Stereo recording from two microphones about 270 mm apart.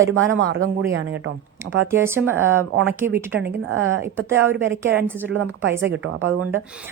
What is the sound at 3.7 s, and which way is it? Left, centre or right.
A woman's voice, right.